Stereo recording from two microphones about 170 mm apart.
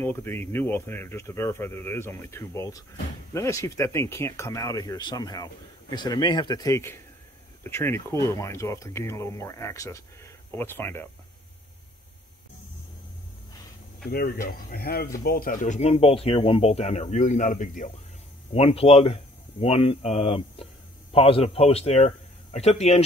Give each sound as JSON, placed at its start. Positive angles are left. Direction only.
{"t": 0.0, "sound": "speech", "side_deg": 15}
{"t": 14.1, "sound": "speech", "side_deg": 65}
{"t": 18.5, "sound": "speech", "side_deg": 35}